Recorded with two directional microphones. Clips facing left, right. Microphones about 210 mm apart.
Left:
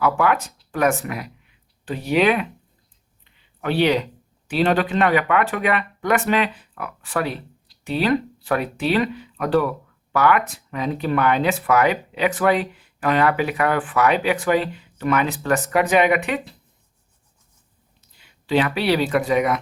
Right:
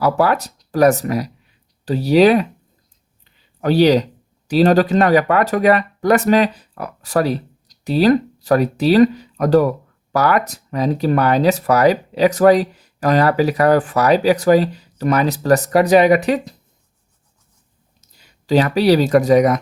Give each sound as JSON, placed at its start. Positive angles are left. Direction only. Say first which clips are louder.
{"t": 0.0, "sound": "speech", "louder": "right 3 dB", "side_deg": -35}
{"t": 18.0, "sound": "speech", "louder": "right 4 dB", "side_deg": -40}